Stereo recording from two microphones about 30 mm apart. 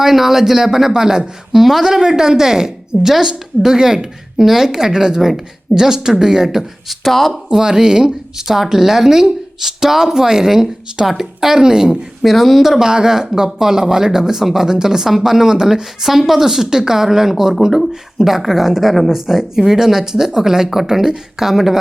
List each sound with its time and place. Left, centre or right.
0.0 s speech: centre
1.5 s speech: centre
1.9 s a woman's voice: centre
6.8 s speech: centre
7.5 s a woman's voice: right
12.2 s speech: centre
12.8 s a woman's voice: right